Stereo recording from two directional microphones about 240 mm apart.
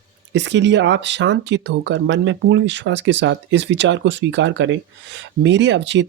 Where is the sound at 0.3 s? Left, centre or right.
Right.